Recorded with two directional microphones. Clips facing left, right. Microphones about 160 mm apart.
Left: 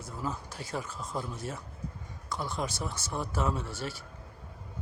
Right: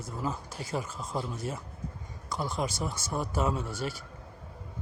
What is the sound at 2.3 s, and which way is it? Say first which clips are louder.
Speech: right 2 dB; 10° right (ahead or behind).